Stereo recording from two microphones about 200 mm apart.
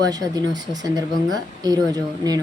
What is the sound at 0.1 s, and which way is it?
Speech, 20° right (ahead or behind).